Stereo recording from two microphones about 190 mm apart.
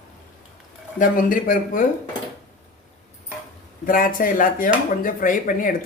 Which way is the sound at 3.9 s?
45° left (ahead or behind).